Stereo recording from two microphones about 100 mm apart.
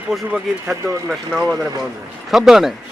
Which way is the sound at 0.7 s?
30° right (ahead or behind).